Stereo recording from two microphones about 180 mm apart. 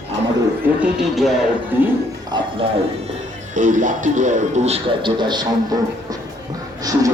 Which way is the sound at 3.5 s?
45° right (ahead or behind).